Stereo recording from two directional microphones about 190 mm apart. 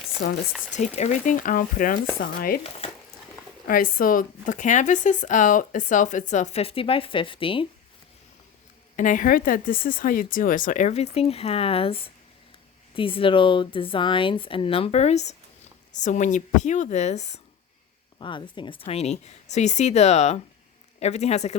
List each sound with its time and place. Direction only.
0.2 s speech: 55° left (ahead or behind)
0.7 s speech: 35° left (ahead or behind)
3.7 s speech: 50° left (ahead or behind); by 7.7 s 25° left (ahead or behind)
9.0 s speech: 45° left (ahead or behind)
18.2 s speech: 25° left (ahead or behind)